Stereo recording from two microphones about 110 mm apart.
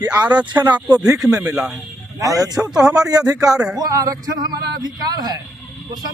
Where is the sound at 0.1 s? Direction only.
15° right (ahead or behind).